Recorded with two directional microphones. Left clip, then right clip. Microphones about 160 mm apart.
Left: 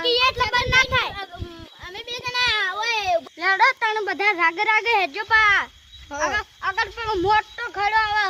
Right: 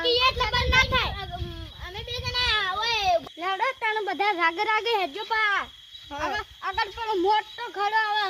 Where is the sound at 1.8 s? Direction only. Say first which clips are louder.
Left 3 dB; 35° left (ahead or behind).